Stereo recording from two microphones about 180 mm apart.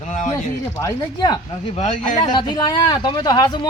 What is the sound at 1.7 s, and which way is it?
Speech, 40° left (ahead or behind).